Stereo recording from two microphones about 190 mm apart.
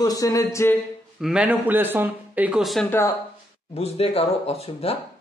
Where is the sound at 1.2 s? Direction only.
5° right (ahead or behind).